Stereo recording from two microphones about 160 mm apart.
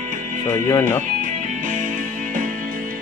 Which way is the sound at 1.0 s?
55° right (ahead or behind).